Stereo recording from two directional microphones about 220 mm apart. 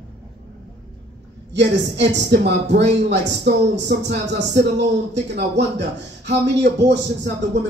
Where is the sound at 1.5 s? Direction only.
50° right (ahead or behind).